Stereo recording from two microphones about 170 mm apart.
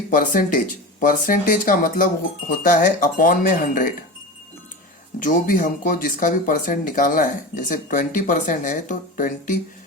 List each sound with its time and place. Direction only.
0.1 s speech: 50° left (ahead or behind)
5.2 s speech: 50° left (ahead or behind)